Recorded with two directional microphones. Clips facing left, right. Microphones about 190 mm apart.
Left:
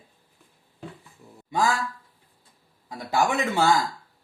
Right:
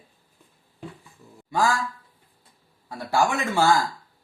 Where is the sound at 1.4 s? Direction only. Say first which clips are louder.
Right 1 dB; 20° left (ahead or behind).